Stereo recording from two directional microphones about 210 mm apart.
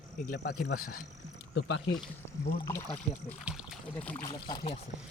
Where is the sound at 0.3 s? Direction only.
50° left (ahead or behind).